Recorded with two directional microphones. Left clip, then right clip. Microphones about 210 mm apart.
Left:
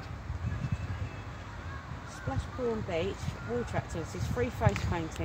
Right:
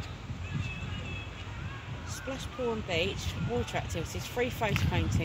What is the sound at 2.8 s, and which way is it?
Speech, 55° left (ahead or behind).